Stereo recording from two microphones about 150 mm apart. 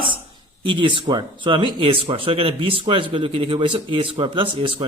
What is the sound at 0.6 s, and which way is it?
Speech, 35° right (ahead or behind).